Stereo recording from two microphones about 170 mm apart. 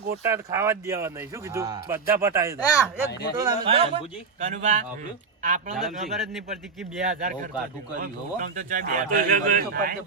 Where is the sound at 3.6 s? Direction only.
35° right (ahead or behind).